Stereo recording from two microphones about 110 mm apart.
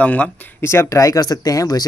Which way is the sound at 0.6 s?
25° left (ahead or behind).